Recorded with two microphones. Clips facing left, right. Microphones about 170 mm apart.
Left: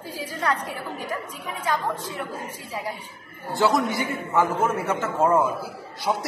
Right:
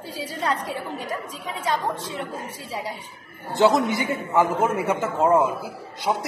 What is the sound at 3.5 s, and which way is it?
A man's voice, 20° right (ahead or behind).